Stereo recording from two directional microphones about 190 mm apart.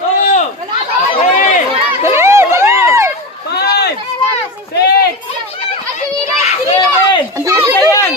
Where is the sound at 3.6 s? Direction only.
55° left (ahead or behind).